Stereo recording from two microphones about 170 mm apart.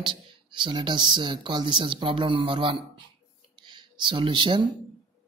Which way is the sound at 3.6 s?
25° right (ahead or behind).